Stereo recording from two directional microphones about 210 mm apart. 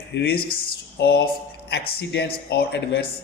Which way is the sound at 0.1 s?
50° left (ahead or behind).